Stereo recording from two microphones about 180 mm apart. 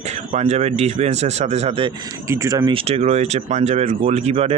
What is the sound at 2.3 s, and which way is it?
Speech, 20° right (ahead or behind).